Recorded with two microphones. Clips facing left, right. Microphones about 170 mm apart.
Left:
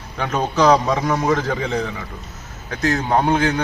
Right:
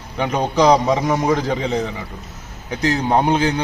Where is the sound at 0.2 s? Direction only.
15° right (ahead or behind).